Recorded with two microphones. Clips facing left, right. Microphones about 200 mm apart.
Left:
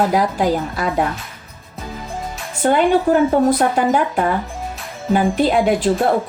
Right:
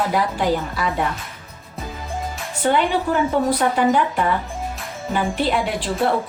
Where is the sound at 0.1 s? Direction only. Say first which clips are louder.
Left 3 dB; 40° left (ahead or behind).